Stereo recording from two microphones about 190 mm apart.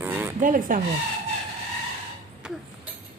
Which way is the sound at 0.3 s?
45° right (ahead or behind).